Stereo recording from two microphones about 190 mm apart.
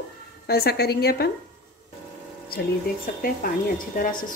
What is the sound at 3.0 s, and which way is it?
Speech, 45° left (ahead or behind).